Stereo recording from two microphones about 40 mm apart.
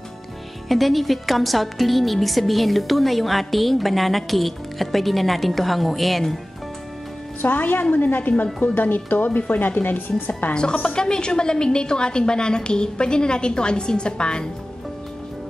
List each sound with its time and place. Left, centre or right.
0.7 s a woman's voice: centre
7.4 s a woman's voice: left
10.5 s a woman's voice: left